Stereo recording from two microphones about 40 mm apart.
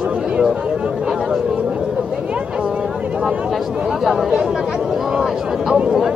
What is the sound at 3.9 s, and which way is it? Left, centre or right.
Speech, centre.